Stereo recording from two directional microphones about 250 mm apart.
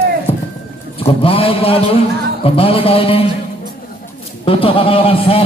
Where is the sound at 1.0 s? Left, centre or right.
Left.